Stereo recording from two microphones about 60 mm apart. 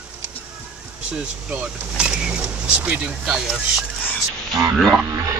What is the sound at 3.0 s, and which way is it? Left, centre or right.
Speech, centre.